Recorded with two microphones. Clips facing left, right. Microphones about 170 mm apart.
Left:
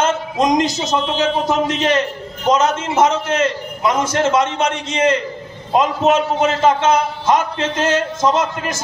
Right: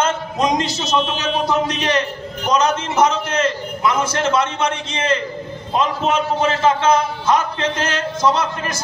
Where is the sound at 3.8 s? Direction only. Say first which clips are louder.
Left 3 dB; 20° left (ahead or behind).